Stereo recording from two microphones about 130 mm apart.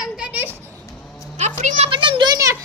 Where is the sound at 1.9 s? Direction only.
40° right (ahead or behind).